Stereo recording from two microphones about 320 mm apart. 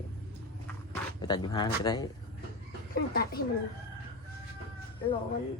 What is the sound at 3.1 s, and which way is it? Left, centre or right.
Speech, left.